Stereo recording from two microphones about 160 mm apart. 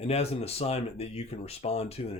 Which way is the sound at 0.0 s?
40° left (ahead or behind).